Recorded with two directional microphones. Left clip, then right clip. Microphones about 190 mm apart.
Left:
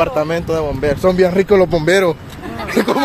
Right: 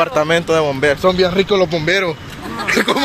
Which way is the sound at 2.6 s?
10° left (ahead or behind).